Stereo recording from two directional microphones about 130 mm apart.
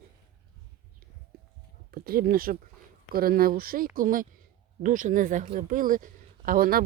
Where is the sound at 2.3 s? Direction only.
90° right.